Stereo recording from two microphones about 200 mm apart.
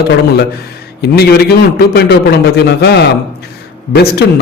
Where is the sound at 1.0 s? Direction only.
55° left (ahead or behind).